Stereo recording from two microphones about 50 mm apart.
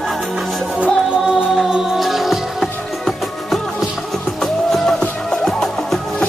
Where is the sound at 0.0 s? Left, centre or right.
Centre.